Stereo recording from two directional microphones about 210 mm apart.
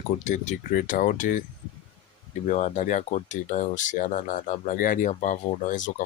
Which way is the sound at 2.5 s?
35° left (ahead or behind).